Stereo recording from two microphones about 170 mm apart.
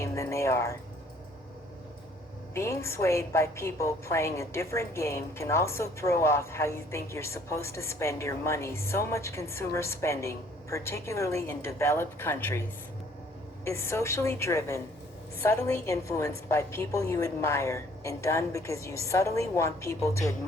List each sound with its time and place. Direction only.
0.0 s a sound: 15° left (ahead or behind)
2.6 s a woman's voice: 15° left (ahead or behind)
13.7 s a woman's voice: 15° left (ahead or behind)